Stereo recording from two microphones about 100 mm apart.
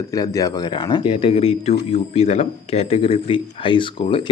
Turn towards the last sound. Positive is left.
turn(degrees=60)  # may be behind; listen again after turning